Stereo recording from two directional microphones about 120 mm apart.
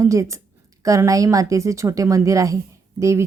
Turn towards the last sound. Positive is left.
turn(degrees=-25)  # may be behind; listen again after turning